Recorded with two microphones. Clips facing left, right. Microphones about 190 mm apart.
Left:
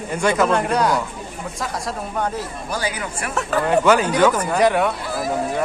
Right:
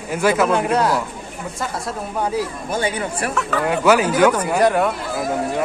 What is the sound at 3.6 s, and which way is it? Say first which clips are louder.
Speech: even; 10° right (ahead or behind).